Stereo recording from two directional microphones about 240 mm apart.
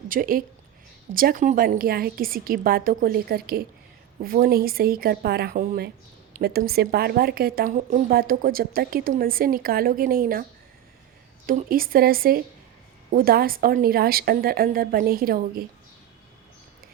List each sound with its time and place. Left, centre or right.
0.1 s speech: right
11.4 s speech: right